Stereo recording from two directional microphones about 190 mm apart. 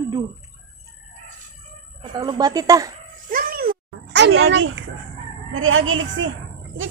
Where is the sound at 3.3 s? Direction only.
50° right (ahead or behind); by 4.8 s 85° right.